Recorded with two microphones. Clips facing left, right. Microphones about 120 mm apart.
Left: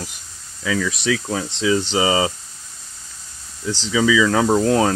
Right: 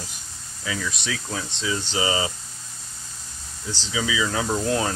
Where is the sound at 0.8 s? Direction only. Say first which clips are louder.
Left 9 dB; 90° left.